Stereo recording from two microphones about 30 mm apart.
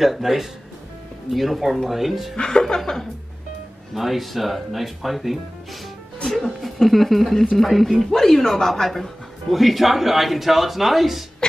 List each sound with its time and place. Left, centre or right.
0.0 s speech: centre
2.3 s a woman's voice: left
3.9 s speech: centre
8.8 s speech: centre